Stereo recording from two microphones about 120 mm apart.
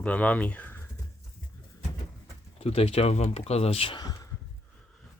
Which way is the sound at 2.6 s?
55° left (ahead or behind).